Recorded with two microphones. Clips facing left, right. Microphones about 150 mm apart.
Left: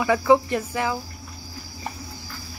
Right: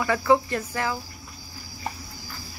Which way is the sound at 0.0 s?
15° left (ahead or behind).